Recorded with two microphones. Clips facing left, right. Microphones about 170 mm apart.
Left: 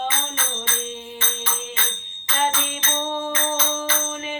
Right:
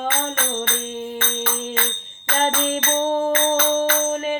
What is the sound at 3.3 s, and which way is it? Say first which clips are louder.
Music: right 7 dB; 55° right (ahead or behind).